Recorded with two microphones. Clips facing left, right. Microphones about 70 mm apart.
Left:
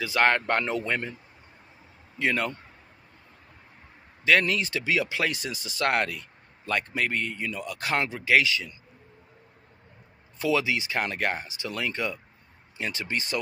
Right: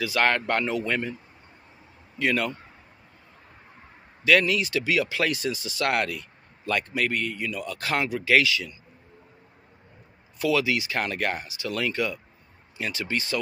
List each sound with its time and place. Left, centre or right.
0.0 s speech: left
2.1 s speech: left
4.2 s speech: left
10.4 s speech: left